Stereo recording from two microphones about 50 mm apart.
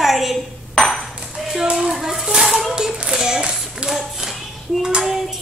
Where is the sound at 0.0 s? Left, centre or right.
Centre.